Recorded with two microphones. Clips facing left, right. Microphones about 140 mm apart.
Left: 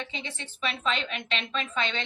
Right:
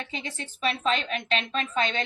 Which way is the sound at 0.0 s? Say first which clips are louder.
Right 2 dB; 40° right (ahead or behind).